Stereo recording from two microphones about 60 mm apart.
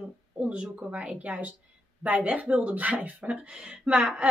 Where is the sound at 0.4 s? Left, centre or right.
Centre.